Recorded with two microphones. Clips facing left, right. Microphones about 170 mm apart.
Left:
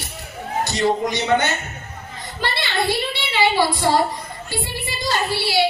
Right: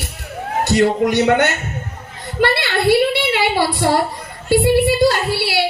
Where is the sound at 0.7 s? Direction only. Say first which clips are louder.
Right 6 dB; 60° right (ahead or behind).